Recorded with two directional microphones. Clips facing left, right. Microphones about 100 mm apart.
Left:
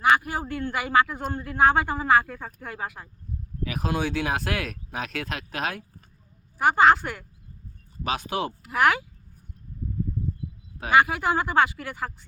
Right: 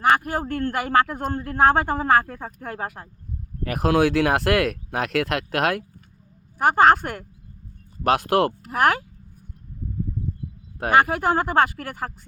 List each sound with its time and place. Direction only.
0.0 s speech: 50° right (ahead or behind)
3.6 s speech: 60° right (ahead or behind)
6.6 s speech: 50° right (ahead or behind)
8.0 s speech: 80° right
8.6 s speech: 45° right (ahead or behind)
10.8 s speech: 50° right (ahead or behind)